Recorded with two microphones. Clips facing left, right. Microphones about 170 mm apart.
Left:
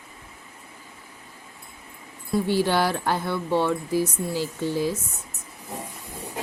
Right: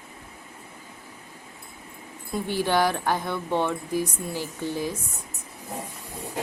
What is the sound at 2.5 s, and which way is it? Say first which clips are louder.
A woman's voice: even; 15° right (ahead or behind).